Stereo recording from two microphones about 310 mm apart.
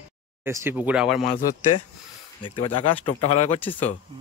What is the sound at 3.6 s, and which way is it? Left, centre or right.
Speech, centre.